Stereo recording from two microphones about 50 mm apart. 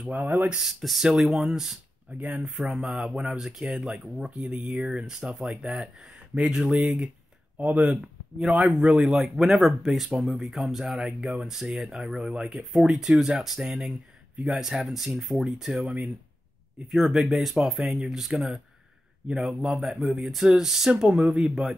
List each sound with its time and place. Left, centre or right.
0.1 s speech: right
0.6 s speech: centre
2.1 s speech: right
2.4 s speech: centre
6.3 s speech: right
6.6 s speech: centre
7.5 s speech: right; by 15.8 s centre
15.8 s speech: right
16.9 s speech: centre